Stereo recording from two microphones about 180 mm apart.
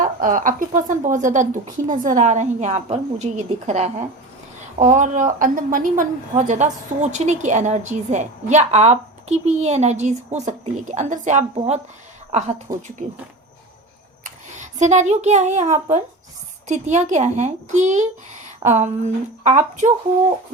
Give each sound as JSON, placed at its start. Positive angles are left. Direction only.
{"t": 0.0, "sound": "a woman's voice", "side_deg": -45}
{"t": 14.3, "sound": "a woman's voice", "side_deg": -40}